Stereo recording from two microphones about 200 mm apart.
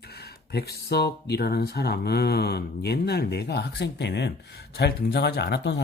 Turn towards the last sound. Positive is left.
turn(degrees=60)  # may be behind; listen again after turning